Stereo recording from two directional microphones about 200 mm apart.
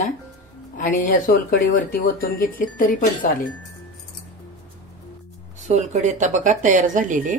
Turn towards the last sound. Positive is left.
turn(degrees=-40)  # may be behind; listen again after turning